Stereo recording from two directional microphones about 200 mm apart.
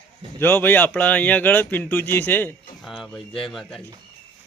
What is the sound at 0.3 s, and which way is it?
Speech, 10° left (ahead or behind).